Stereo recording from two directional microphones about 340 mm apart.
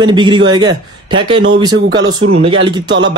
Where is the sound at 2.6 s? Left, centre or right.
Right.